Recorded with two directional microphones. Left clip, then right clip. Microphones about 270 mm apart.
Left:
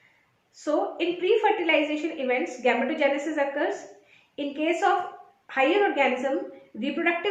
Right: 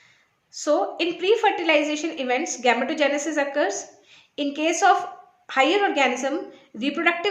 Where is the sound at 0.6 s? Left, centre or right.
Right.